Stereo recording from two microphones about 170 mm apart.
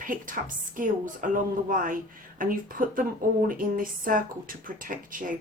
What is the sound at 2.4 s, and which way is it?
Speech, 55° right (ahead or behind).